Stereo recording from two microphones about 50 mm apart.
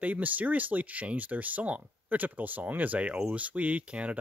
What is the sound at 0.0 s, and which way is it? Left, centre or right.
Speech, right.